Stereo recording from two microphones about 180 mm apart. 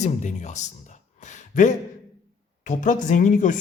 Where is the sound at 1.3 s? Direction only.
45° left (ahead or behind).